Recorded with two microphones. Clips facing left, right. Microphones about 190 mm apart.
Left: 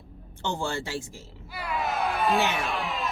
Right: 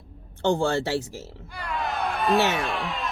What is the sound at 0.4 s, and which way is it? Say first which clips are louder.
Speech: right 8 dB; 55° right (ahead or behind).